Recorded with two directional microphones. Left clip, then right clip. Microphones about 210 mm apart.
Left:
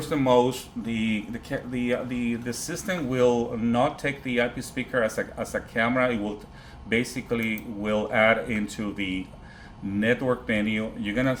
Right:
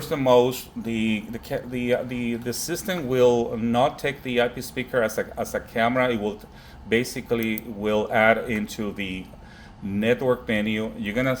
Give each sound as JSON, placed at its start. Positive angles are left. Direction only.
{"t": 0.0, "sound": "speech", "side_deg": -25}